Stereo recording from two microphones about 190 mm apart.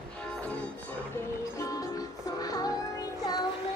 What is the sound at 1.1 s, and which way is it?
Music, 15° left (ahead or behind).